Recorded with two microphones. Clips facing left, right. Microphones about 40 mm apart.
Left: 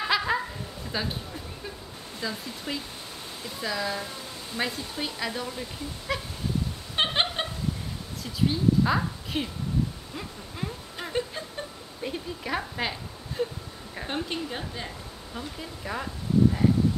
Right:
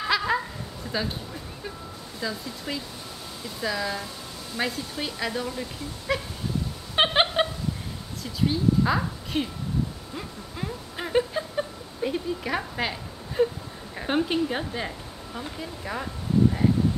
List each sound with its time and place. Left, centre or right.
0.1 s a sound: centre
0.9 s speech: centre
2.2 s speech: centre
7.0 s a sound: centre
8.2 s speech: centre
11.0 s a sound: centre
12.0 s speech: centre
13.4 s a woman's voice: right
15.3 s speech: centre